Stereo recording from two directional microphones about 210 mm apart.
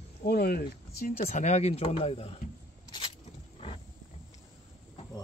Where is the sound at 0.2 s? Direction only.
45° left (ahead or behind); by 2.3 s 30° left (ahead or behind).